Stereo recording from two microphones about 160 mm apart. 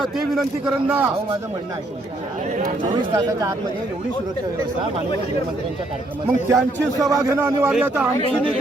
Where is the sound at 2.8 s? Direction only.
30° right (ahead or behind).